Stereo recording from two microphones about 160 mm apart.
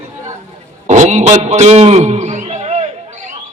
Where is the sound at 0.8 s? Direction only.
50° right (ahead or behind).